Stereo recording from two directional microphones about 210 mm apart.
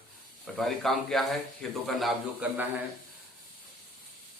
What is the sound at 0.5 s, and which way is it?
A man's voice, centre (ahead or behind).